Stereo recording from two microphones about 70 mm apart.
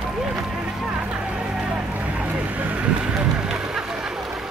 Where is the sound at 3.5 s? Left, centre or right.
Centre.